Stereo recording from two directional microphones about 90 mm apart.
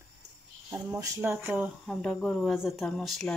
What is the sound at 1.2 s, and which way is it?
Speech, 25° right (ahead or behind).